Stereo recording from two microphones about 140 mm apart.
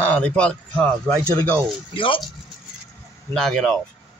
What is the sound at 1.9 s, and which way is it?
Speech, 40° left (ahead or behind).